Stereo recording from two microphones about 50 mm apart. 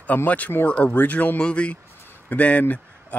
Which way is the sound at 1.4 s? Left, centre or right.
Left.